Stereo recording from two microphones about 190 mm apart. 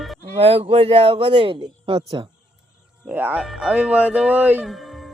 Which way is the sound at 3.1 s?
10° right (ahead or behind).